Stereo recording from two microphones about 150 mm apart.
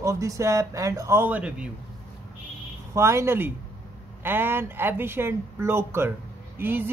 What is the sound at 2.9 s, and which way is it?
A man's voice, 20° right (ahead or behind).